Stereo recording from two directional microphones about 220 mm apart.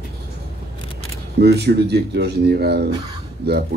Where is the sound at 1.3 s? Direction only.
50° right (ahead or behind).